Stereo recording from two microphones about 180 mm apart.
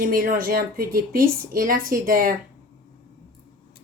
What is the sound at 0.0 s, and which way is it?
Speech, 50° right (ahead or behind).